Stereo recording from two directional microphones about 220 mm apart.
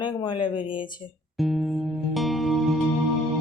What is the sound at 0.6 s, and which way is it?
Speech, 5° right (ahead or behind).